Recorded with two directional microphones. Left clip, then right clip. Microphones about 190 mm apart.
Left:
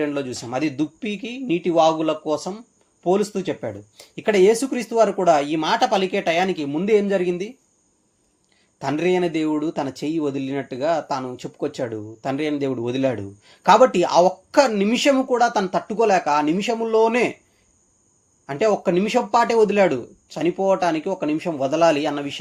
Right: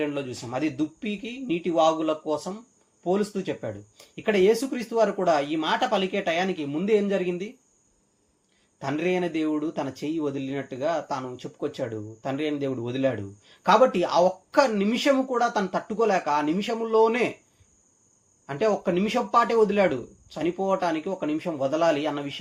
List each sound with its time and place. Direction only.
0.0 s speech: 35° left (ahead or behind)
8.8 s speech: 40° left (ahead or behind)
18.4 s speech: 35° left (ahead or behind)